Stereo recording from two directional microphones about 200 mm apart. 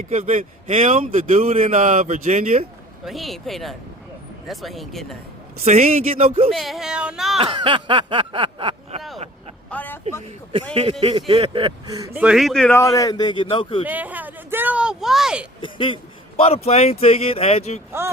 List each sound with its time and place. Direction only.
0.1 s a man's voice: 35° right (ahead or behind)
3.0 s speech: centre (ahead or behind)
5.6 s a man's voice: 35° right (ahead or behind)
6.5 s speech: centre (ahead or behind)
7.3 s a sound: 25° right (ahead or behind)
9.6 s vehicle: 10° left (ahead or behind)
11.3 s speech: 25° right (ahead or behind); by 12.7 s centre (ahead or behind)
12.7 s a man's voice: 15° left (ahead or behind)
13.8 s speech: 10° right (ahead or behind)
15.6 s a man's voice: 25° left (ahead or behind)
18.0 s speech: 15° right (ahead or behind)